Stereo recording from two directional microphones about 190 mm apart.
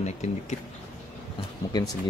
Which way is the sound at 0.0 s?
35° left (ahead or behind).